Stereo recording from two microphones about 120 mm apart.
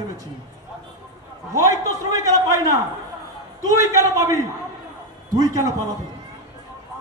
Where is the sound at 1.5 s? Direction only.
30° right (ahead or behind).